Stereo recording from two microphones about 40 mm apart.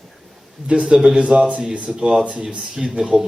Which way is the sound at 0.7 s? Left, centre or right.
Right.